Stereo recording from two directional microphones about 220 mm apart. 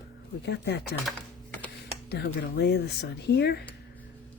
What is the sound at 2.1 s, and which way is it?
Speech, 50° left (ahead or behind).